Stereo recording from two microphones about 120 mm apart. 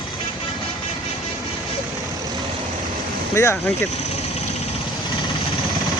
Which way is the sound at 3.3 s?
20° left (ahead or behind).